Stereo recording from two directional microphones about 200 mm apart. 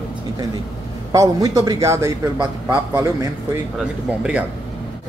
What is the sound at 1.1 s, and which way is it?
A man's voice, 15° right (ahead or behind).